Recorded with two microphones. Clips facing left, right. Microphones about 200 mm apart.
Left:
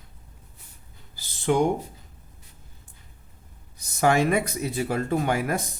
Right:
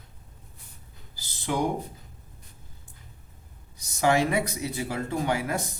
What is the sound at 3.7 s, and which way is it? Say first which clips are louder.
Speech: left 2 dB; 50° left (ahead or behind).